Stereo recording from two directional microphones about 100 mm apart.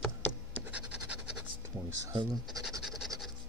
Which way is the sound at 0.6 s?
15° right (ahead or behind).